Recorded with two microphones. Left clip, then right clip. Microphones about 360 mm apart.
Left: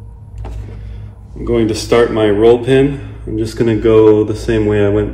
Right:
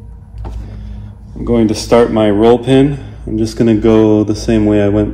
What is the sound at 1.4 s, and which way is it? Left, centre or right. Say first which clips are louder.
Speech: right 1 dB; right.